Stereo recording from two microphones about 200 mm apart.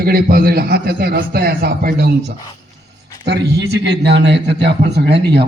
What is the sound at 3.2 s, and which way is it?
A man's voice, 55° right (ahead or behind).